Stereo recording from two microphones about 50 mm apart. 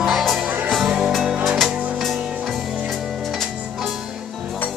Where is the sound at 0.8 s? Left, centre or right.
Centre.